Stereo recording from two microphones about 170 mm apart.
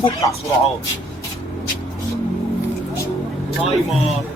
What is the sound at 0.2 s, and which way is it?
Speech, 20° left (ahead or behind).